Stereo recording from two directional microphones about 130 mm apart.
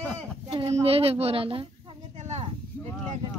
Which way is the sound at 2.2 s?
60° right (ahead or behind).